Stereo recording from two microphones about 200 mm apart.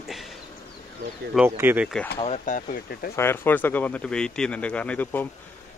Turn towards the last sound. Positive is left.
turn(degrees=10)  # may be behind; listen again after turning